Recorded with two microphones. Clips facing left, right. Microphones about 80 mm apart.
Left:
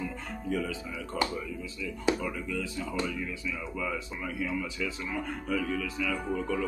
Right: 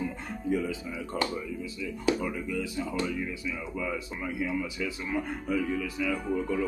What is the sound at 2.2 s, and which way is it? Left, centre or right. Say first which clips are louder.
Speech: right 2 dB; centre.